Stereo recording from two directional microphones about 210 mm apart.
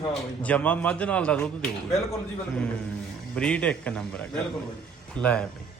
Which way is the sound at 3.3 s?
5° left (ahead or behind).